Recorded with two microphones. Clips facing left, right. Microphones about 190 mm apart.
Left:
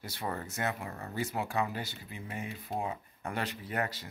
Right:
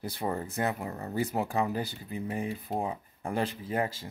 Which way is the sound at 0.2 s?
30° right (ahead or behind).